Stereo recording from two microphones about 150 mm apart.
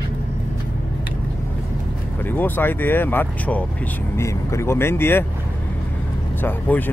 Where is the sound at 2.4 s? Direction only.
15° left (ahead or behind).